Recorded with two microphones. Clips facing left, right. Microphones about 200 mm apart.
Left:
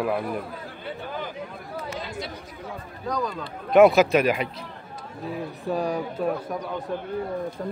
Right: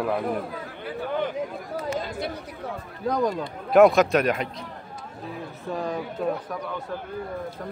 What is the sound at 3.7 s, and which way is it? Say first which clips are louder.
Speech: left 1 dB; centre (ahead or behind).